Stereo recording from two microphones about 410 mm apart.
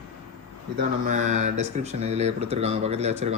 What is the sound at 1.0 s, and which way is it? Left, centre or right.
Speech, centre.